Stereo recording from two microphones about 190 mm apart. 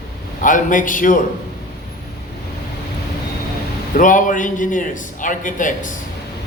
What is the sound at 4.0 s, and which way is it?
A man's voice, 45° left (ahead or behind).